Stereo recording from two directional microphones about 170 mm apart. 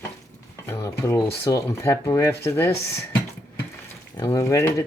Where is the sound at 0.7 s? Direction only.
15° left (ahead or behind).